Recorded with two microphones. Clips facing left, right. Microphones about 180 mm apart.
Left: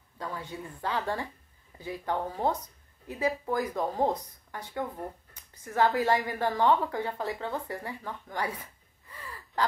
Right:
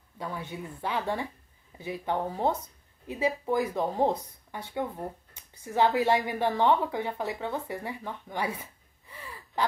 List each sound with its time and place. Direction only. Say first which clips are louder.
0.2 s speech: right 1 dB; 20° right (ahead or behind)
9.1 s gasp: even; 20° right (ahead or behind)